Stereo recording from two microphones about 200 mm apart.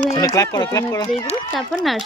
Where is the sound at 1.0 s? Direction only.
30° left (ahead or behind).